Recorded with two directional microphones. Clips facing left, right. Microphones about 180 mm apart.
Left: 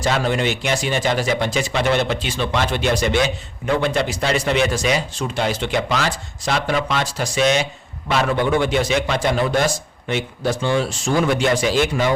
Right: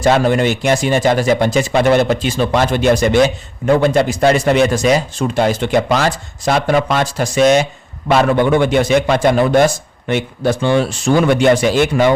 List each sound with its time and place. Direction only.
0.0 s speech: 50° right (ahead or behind)